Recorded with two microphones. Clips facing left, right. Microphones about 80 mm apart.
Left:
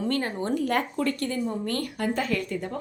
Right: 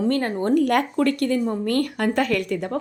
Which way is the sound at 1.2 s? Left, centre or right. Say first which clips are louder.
Right 6 dB; right.